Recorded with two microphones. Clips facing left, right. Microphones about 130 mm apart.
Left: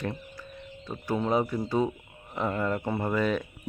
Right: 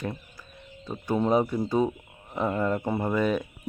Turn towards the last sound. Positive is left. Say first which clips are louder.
# right 2 dB
turn(degrees=-15)  # may be behind; listen again after turning